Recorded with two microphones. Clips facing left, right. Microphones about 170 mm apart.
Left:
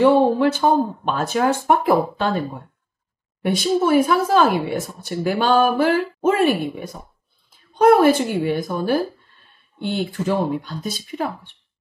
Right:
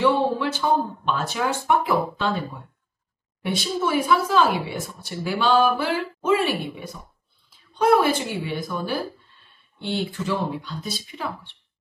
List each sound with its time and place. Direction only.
0.0 s speech: 50° left (ahead or behind)